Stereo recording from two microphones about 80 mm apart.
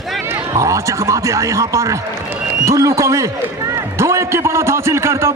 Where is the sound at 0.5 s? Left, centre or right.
Right.